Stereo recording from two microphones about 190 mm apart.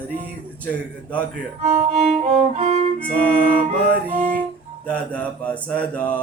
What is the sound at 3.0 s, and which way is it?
Mantra, 5° left (ahead or behind).